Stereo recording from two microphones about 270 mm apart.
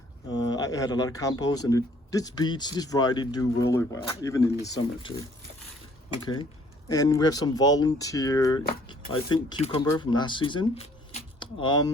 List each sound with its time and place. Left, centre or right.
0.3 s speech: centre
6.2 s speech: centre